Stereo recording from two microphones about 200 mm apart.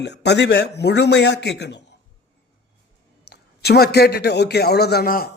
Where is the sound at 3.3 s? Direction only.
55° left (ahead or behind).